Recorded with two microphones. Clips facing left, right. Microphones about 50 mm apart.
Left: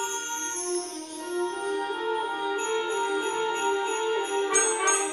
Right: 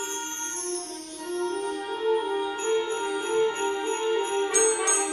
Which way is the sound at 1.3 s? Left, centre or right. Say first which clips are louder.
Even; left.